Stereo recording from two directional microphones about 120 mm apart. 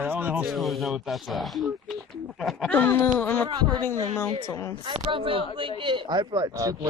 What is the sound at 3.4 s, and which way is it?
Speech, 40° right (ahead or behind).